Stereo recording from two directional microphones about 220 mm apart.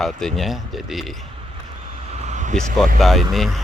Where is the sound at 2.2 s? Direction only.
35° right (ahead or behind).